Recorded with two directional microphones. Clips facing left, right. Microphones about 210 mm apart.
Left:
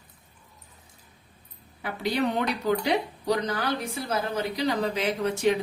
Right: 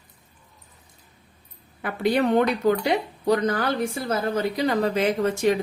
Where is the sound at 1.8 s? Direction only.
55° right (ahead or behind).